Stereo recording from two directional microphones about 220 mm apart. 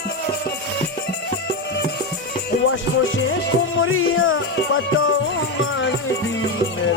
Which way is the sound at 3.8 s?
65° left (ahead or behind).